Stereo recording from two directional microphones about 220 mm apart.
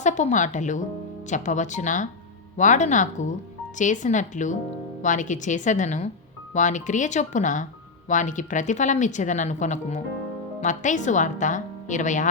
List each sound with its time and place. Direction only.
0.0 s speech: 35° left (ahead or behind)